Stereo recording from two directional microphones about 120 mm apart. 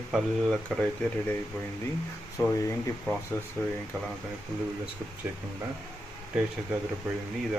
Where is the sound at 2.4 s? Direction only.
30° left (ahead or behind).